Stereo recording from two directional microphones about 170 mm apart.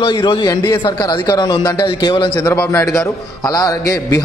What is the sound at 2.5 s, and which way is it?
A man's voice, 15° left (ahead or behind).